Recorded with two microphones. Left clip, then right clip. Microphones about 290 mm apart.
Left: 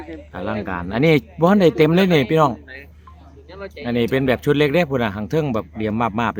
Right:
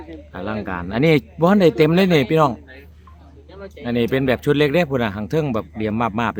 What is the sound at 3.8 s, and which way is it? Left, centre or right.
Speech, centre.